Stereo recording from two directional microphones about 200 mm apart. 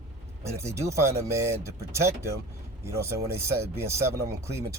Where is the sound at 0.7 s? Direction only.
15° right (ahead or behind).